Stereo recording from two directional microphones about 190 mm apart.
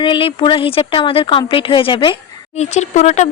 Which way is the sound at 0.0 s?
25° left (ahead or behind).